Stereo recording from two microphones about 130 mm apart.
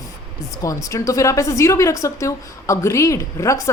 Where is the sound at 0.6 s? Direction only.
25° left (ahead or behind).